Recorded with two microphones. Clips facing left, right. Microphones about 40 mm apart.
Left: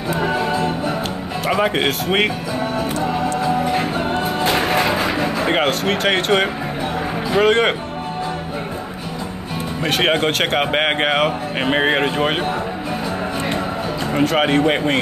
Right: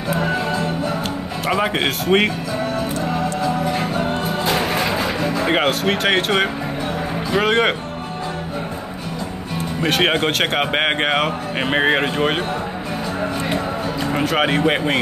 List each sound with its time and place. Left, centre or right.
0.1 s music: centre
1.5 s speech: centre
3.4 s music: centre
5.4 s speech: centre
9.8 s speech: centre
14.1 s speech: centre